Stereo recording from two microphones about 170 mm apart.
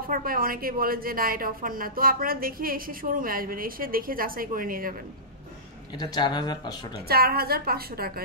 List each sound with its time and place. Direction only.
0.1 s a woman's voice: 60° right (ahead or behind)
5.9 s speech: 25° left (ahead or behind)
7.1 s a woman's voice: 65° right (ahead or behind)